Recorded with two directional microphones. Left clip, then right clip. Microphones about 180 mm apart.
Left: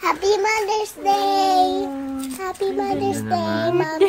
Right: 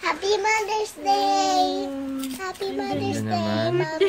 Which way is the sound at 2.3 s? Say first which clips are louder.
Left 8 dB; 40° left (ahead or behind).